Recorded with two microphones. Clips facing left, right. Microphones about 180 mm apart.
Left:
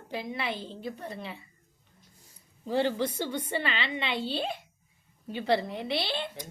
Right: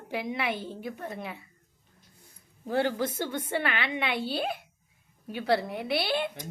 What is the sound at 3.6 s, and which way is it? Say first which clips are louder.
Speech: right 2 dB; 55° right (ahead or behind).